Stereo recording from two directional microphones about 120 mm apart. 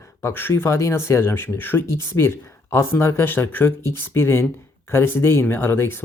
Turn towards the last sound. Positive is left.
turn(degrees=20)  # may be behind; listen again after turning